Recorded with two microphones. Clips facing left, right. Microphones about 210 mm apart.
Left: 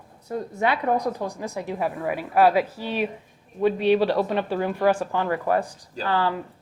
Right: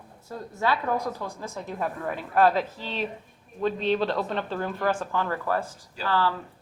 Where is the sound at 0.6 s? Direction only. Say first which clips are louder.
Left 3 dB; 20° left (ahead or behind).